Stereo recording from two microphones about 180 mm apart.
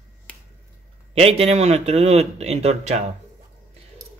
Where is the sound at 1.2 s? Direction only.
35° right (ahead or behind).